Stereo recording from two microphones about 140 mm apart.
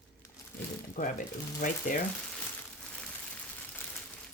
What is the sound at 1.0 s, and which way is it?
A woman's voice, 80° left.